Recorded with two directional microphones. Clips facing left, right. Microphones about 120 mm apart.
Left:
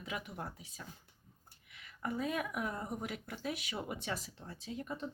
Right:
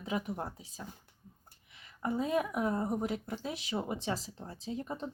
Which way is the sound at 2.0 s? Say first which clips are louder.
Right 5 dB; 30° right (ahead or behind).